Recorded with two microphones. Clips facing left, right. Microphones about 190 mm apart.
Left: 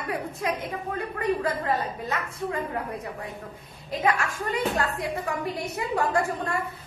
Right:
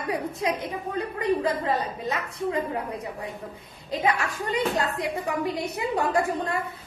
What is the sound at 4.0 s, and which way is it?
Speech, 20° right (ahead or behind).